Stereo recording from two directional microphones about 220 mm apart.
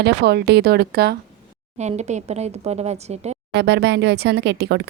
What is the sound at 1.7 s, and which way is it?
Speech, 30° right (ahead or behind).